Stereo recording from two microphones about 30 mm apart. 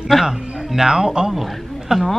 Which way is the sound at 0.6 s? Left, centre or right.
Centre.